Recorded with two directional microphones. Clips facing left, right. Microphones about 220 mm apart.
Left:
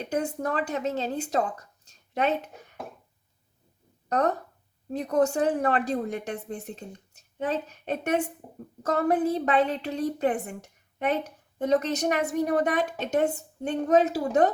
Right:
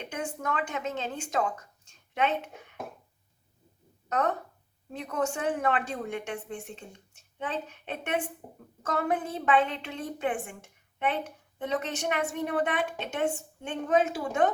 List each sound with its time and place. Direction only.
0.0 s a woman's voice: 35° left (ahead or behind)
4.1 s a woman's voice: 35° left (ahead or behind)